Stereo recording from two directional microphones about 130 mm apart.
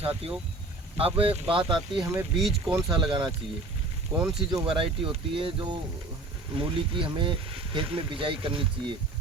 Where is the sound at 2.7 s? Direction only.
30° right (ahead or behind).